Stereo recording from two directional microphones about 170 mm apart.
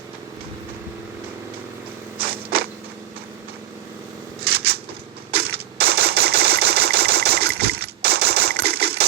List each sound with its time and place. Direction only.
2.1 s a sound: 65° right (ahead or behind)
4.4 s scissors: 70° right (ahead or behind)
5.3 s typewriter: 70° right (ahead or behind)